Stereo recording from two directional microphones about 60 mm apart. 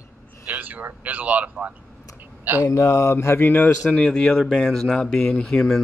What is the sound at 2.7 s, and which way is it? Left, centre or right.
Mantra, left.